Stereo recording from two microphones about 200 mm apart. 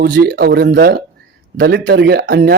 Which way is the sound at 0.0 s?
55° right (ahead or behind).